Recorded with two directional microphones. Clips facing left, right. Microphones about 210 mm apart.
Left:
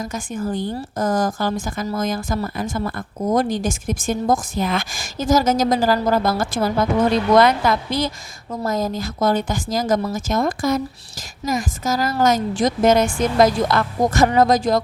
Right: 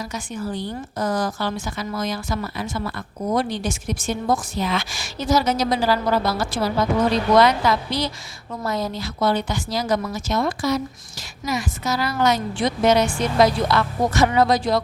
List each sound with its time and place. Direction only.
0.1 s a woman's voice: 50° left (ahead or behind)